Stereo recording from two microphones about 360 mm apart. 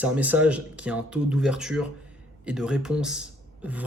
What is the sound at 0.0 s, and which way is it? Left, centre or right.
Speech, centre.